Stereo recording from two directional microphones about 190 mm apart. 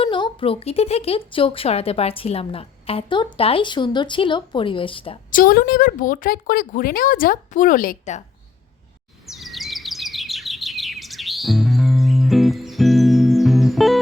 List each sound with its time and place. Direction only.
0.0 s speech: 25° left (ahead or behind)
5.3 s speech: 50° left (ahead or behind)
9.2 s chirp: centre (ahead or behind)